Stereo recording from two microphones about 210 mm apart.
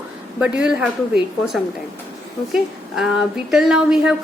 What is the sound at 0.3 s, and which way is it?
A woman's voice, 5° right (ahead or behind).